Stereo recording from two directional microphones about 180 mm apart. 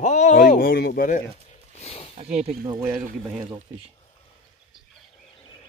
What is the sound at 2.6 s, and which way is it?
Speech, 15° right (ahead or behind).